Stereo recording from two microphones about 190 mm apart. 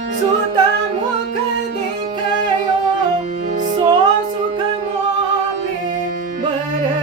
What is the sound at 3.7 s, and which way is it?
Music, 25° right (ahead or behind).